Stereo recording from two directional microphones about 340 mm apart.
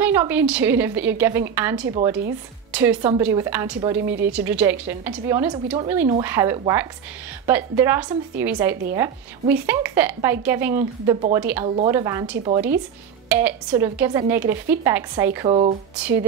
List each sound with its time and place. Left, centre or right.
0.0 s a woman's voice: centre
11.6 s a woman's voice: centre